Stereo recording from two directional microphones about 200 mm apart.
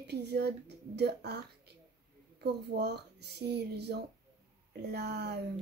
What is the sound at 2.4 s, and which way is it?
Speech, 55° right (ahead or behind).